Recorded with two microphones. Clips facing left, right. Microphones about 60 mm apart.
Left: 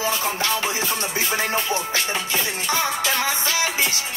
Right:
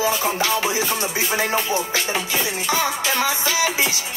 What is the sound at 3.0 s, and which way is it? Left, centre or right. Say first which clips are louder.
Music: right 2 dB; centre.